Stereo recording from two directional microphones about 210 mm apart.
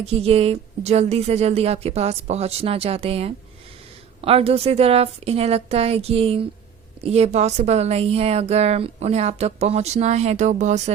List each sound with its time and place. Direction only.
0.0 s a woman's voice: 30° right (ahead or behind)